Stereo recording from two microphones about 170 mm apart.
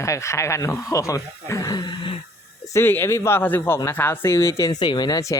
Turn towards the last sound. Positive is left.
turn(degrees=20)  # may be behind; listen again after turning